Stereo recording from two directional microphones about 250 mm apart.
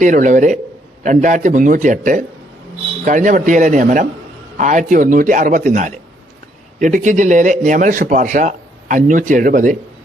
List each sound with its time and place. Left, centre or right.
0.0 s speech: right